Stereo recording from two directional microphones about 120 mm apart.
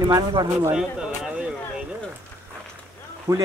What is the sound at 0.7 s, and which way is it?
Speech, 10° right (ahead or behind).